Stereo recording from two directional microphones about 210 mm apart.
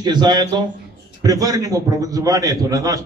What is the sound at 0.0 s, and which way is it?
A man's voice, 20° right (ahead or behind).